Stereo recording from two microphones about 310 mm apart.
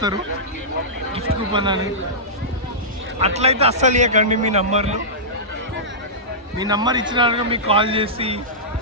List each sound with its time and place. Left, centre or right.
1.5 s a man's voice: centre
3.2 s a man's voice: centre
6.6 s a man's voice: centre